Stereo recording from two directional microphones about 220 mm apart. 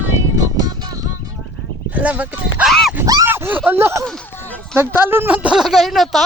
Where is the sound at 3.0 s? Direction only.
15° right (ahead or behind).